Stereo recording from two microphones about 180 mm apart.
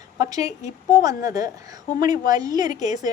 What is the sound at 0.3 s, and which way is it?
A woman's voice, 20° right (ahead or behind).